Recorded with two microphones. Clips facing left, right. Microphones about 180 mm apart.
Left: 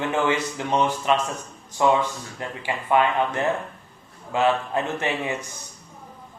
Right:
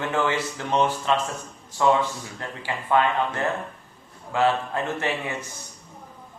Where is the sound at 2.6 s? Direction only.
15° left (ahead or behind).